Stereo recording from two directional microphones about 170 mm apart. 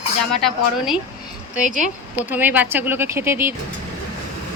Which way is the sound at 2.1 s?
10° right (ahead or behind).